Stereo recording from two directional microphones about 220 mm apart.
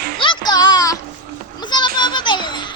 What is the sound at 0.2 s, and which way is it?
Child singing, 20° left (ahead or behind).